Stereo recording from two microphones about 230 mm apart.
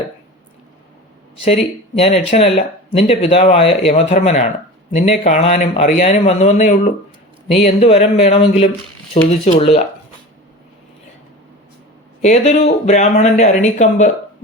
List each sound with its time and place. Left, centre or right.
2.0 s speech: left
12.2 s speech: left